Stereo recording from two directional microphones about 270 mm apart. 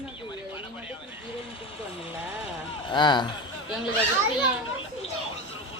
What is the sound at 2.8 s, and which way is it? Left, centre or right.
Speech, centre.